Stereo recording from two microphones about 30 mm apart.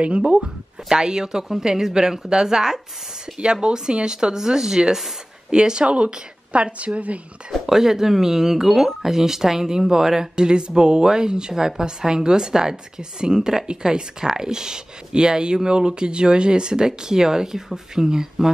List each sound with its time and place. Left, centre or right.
0.2 s speech: right
3.6 s speech: right
5.5 s a woman's voice: right
7.5 s speech: centre
10.3 s speech: right